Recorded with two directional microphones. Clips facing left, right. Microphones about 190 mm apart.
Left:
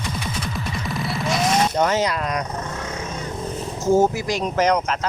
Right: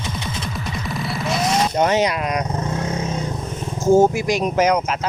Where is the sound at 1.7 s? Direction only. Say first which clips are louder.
Right 2 dB; 20° right (ahead or behind).